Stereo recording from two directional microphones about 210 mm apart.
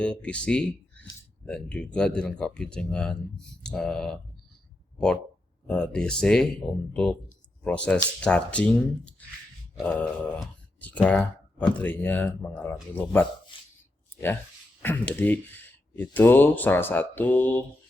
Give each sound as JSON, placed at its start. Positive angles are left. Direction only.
{"t": 0.0, "sound": "speech", "side_deg": 5}
{"t": 5.6, "sound": "speech", "side_deg": 5}
{"t": 13.5, "sound": "a sound", "side_deg": 25}
{"t": 14.8, "sound": "speech", "side_deg": 10}